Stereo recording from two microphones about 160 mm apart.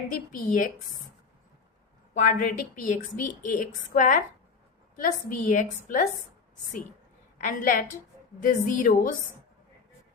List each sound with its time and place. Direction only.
0.1 s a woman's voice: 55° left (ahead or behind)
2.1 s a woman's voice: 55° left (ahead or behind)
7.3 s a woman's voice: 50° left (ahead or behind)